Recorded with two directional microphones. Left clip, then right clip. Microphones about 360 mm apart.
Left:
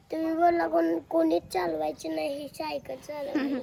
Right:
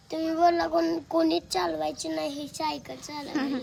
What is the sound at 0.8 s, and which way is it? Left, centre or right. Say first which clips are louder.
Speech: even; centre.